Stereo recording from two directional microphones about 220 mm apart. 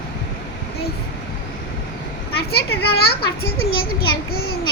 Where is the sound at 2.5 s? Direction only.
45° left (ahead or behind).